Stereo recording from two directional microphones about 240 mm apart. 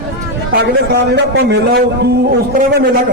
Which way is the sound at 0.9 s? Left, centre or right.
Right.